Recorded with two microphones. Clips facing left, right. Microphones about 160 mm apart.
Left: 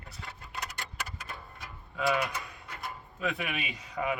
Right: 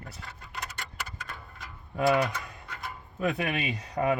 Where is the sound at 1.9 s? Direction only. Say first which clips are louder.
Right 5 dB; 40° right (ahead or behind).